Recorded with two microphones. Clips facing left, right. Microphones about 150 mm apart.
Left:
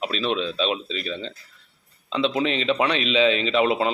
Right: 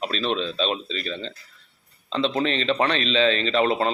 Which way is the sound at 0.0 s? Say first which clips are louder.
Left 1 dB; 5° left (ahead or behind).